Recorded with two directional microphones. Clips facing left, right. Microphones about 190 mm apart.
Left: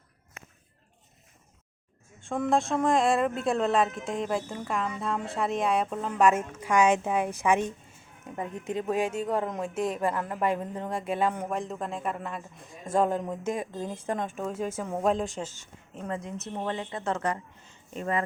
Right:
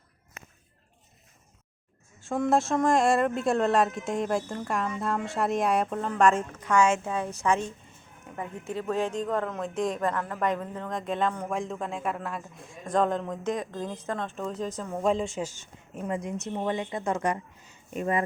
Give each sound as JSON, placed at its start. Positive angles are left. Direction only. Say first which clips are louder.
{"t": 2.2, "sound": "speech", "louder": "right 1 dB", "side_deg": -5}
{"t": 15.4, "sound": "a woman's voice", "louder": "right 2 dB", "side_deg": -15}